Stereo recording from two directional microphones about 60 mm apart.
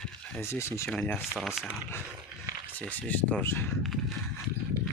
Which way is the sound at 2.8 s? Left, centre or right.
Left.